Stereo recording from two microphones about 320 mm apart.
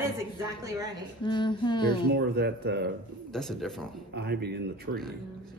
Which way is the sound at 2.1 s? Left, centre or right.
Right.